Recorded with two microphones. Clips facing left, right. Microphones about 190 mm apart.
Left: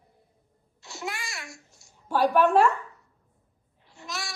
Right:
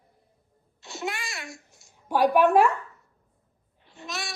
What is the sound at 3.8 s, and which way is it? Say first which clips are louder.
Babbling: right 1 dB; 20° right (ahead or behind).